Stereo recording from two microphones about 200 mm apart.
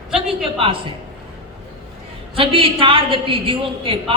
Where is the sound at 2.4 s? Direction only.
25° right (ahead or behind).